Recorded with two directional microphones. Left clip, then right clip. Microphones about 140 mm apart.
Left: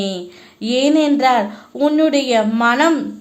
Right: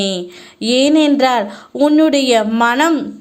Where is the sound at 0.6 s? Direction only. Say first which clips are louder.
Right 3 dB; 30° right (ahead or behind).